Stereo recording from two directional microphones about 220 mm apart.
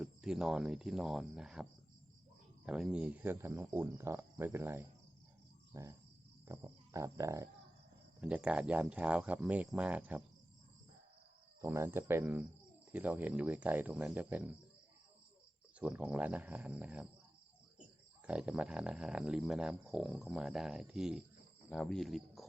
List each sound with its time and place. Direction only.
0.0 s speech: 5° right (ahead or behind)
2.6 s speech: 5° right (ahead or behind)
11.6 s speech: 10° right (ahead or behind)
15.8 s speech: 5° right (ahead or behind)
18.3 s speech: 5° right (ahead or behind)